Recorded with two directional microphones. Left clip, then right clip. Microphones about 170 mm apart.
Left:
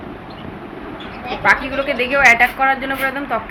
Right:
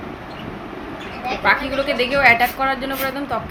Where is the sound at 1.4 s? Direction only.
15° right (ahead or behind).